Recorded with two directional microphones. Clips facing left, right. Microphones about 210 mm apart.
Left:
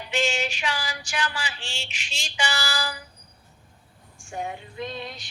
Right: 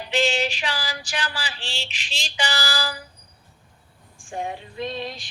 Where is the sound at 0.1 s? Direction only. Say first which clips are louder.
Right 4 dB; 35° right (ahead or behind).